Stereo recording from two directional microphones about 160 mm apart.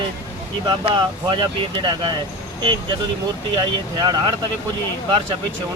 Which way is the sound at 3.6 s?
25° right (ahead or behind).